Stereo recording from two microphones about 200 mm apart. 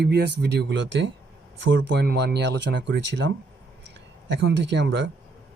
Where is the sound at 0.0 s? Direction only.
55° right (ahead or behind).